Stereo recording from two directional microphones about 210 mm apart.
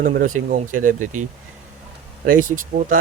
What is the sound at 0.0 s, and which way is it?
A man's voice, 40° right (ahead or behind).